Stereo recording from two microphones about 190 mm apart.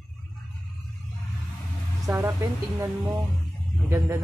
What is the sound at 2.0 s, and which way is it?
Speech, 15° right (ahead or behind).